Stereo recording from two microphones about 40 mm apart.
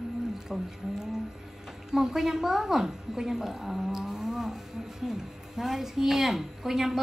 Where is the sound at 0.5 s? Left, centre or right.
Centre.